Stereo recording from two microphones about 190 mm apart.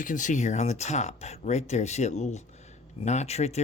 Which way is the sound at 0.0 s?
40° left (ahead or behind).